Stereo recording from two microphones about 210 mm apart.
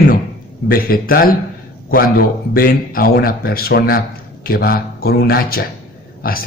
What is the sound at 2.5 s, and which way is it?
Speech, 45° left (ahead or behind).